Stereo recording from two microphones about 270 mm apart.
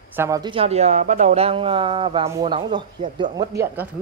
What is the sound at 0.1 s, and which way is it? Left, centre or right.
Speech, centre.